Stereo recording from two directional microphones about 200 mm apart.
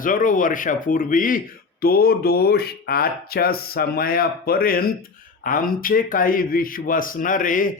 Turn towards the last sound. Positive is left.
turn(degrees=40)  # may be behind; listen again after turning